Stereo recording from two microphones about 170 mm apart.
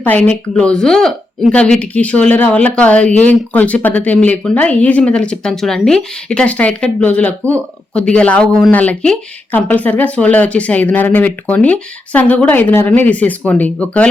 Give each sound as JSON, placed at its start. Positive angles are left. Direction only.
{"t": 0.0, "sound": "speech", "side_deg": 10}